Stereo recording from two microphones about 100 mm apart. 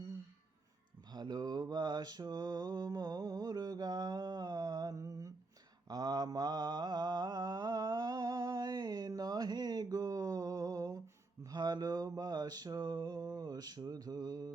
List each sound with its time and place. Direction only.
1.1 s mantra: 45° right (ahead or behind)